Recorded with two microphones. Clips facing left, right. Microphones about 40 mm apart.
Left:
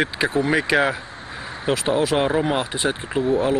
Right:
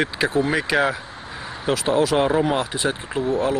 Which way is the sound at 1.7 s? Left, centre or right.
Left.